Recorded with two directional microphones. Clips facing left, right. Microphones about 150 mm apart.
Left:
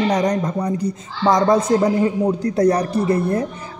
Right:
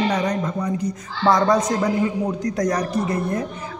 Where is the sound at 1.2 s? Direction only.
20° left (ahead or behind).